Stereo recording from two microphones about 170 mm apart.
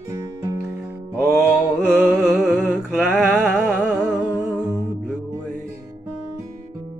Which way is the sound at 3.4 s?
10° right (ahead or behind).